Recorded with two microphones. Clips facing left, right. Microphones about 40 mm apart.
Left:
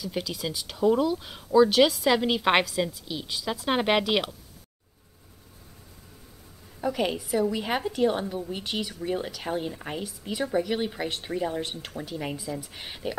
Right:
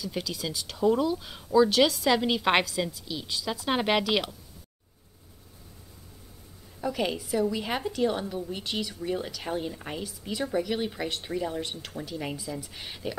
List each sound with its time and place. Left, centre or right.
0.0 s a woman's voice: centre
6.8 s a woman's voice: centre
12.2 s a woman's voice: centre